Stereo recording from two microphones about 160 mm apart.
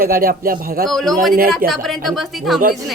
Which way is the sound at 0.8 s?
Centre (ahead or behind).